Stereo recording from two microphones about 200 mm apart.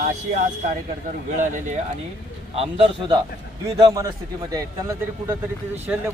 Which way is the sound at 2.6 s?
30° right (ahead or behind).